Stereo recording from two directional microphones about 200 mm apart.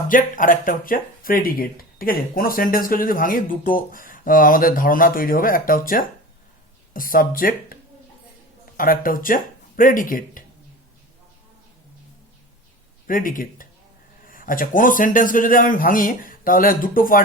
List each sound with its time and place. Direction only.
0.1 s speech: 45° left (ahead or behind)
8.8 s speech: 45° left (ahead or behind)
13.1 s speech: 45° left (ahead or behind)